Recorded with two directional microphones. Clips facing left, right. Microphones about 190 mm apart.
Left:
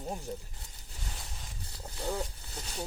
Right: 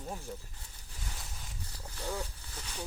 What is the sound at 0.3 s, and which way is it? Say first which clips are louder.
Speech: left 4 dB; 35° left (ahead or behind).